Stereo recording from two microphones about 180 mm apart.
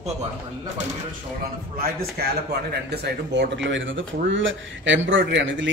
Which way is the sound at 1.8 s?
60° right (ahead or behind).